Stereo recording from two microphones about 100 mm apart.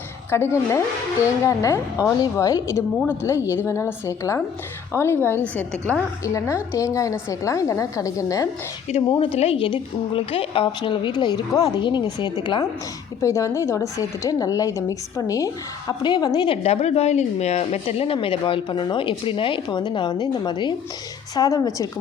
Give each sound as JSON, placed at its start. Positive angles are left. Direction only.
{"t": 0.3, "sound": "a woman's voice", "side_deg": 25}
{"t": 6.2, "sound": "a woman's voice", "side_deg": 30}
{"t": 9.1, "sound": "a woman's voice", "side_deg": 80}
{"t": 9.6, "sound": "a woman's voice", "side_deg": 60}
{"t": 13.2, "sound": "a woman's voice", "side_deg": 30}
{"t": 16.5, "sound": "a woman's voice", "side_deg": 90}